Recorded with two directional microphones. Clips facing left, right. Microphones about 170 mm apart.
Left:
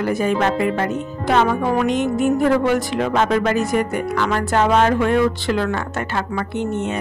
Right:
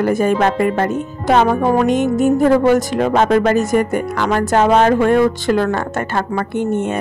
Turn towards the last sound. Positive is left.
turn(degrees=-50)  # may be behind; listen again after turning